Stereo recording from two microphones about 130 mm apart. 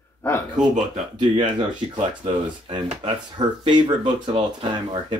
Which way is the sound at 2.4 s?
40° right (ahead or behind).